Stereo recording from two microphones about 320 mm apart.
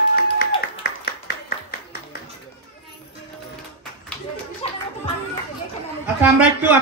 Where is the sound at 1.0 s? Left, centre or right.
Left.